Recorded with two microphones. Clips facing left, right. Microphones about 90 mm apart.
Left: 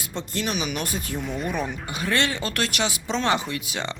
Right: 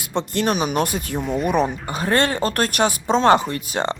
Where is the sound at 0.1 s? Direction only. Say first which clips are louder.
Right 8 dB; 65° right (ahead or behind).